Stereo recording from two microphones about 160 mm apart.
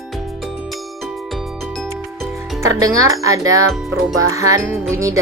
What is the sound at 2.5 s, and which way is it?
Speech, 20° right (ahead or behind).